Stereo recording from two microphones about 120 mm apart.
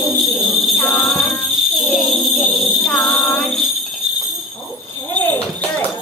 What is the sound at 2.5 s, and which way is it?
Music, centre (ahead or behind).